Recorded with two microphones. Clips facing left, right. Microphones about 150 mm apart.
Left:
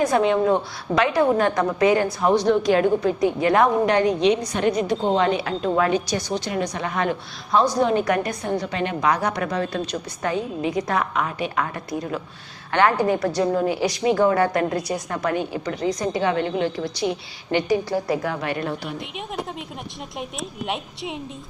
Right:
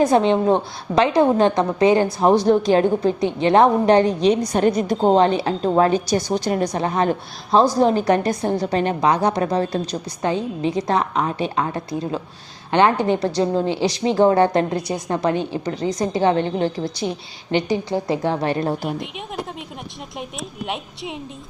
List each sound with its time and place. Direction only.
0.0 s a woman's voice: 25° right (ahead or behind)
17.5 s a woman's voice: 25° right (ahead or behind); by 18.9 s 40° right (ahead or behind)
18.9 s a woman's voice: centre (ahead or behind)
20.7 s a woman's voice: centre (ahead or behind)